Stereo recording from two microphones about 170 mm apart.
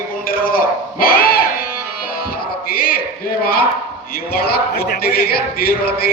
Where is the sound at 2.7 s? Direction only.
60° left (ahead or behind).